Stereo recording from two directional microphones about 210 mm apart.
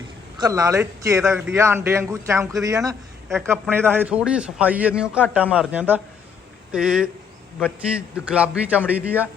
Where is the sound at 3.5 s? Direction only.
10° right (ahead or behind).